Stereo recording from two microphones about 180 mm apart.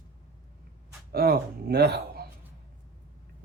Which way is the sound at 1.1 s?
60° right (ahead or behind).